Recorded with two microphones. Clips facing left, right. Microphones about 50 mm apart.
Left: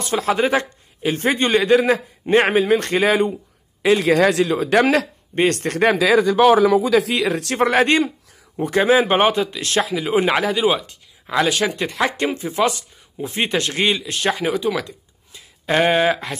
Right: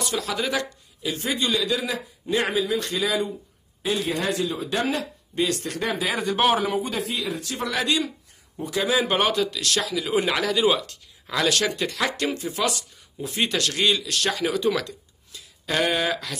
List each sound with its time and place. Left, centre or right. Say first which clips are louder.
0.0 s a man's voice: left 8 dB; left
3.8 s speech: left 10 dB; left
5.3 s a man's voice: left 7 dB; left
6.9 s speech: left 10 dB; left
7.6 s a man's voice: left 9 dB; left
14.6 s speech: left 1 dB; centre
15.3 s a sound: left 6 dB; left